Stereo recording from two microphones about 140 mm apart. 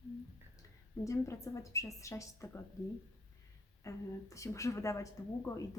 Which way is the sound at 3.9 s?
20° left (ahead or behind).